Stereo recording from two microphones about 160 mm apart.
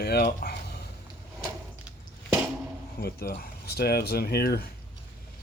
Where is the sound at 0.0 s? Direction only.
80° left.